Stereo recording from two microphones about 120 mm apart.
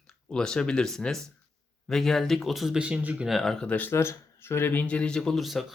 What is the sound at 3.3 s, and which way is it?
Speech, centre (ahead or behind).